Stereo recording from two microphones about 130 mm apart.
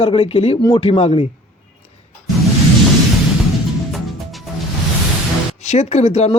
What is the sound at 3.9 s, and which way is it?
Music, centre (ahead or behind).